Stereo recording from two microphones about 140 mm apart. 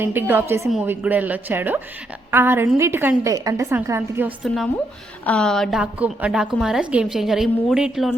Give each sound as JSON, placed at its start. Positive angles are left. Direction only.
{"t": 0.0, "sound": "a woman's voice", "side_deg": -15}
{"t": 4.4, "sound": "a woman's voice", "side_deg": 0}
{"t": 5.8, "sound": "a woman's voice", "side_deg": -10}